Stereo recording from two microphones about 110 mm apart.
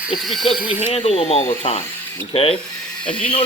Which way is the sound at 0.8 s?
75° left (ahead or behind).